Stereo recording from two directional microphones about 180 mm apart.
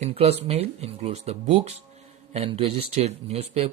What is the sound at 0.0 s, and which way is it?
Speech, 35° right (ahead or behind).